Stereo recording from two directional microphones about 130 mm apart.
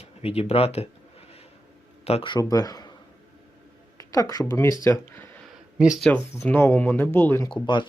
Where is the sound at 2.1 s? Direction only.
50° left (ahead or behind).